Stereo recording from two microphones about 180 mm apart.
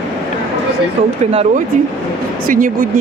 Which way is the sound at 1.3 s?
40° right (ahead or behind).